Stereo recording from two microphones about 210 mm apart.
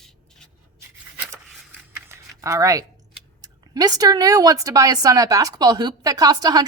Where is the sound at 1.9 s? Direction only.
10° right (ahead or behind).